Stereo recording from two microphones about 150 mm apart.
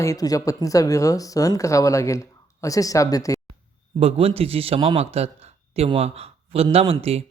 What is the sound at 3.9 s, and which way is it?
A man's voice, 40° right (ahead or behind).